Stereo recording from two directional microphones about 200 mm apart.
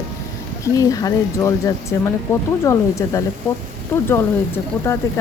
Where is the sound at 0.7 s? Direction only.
15° left (ahead or behind).